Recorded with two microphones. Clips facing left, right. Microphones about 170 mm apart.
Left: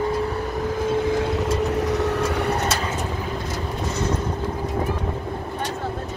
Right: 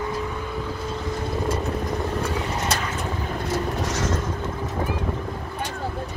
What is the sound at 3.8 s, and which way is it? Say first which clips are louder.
Vehicle: left 1 dB; 90° right.